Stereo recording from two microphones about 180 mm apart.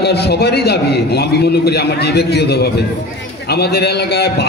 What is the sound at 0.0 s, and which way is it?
A man's voice, 65° left (ahead or behind).